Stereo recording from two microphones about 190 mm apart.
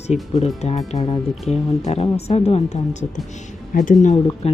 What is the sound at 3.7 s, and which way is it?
Speech, 50° left (ahead or behind).